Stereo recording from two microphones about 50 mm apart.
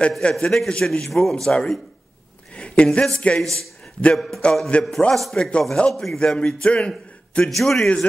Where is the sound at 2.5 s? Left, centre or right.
Left.